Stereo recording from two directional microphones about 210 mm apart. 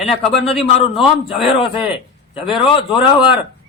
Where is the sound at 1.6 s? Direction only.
25° left (ahead or behind).